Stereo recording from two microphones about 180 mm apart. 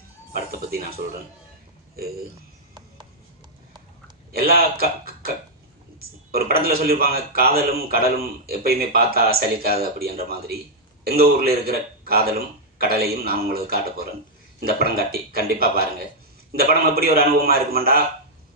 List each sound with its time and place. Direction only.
0.7 s speech: 55° right (ahead or behind)
4.3 s speech: 55° right (ahead or behind)